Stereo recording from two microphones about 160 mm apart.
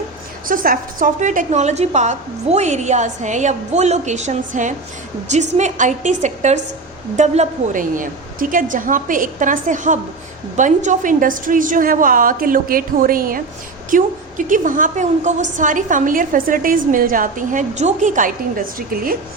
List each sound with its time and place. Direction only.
0.4 s a woman's voice: 60° right (ahead or behind)